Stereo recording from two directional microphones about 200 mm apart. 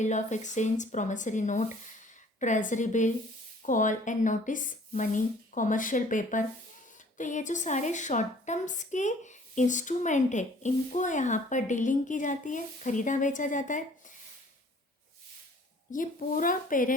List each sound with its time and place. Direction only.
0.0 s a woman's voice: 35° left (ahead or behind)
15.9 s a woman's voice: 40° left (ahead or behind)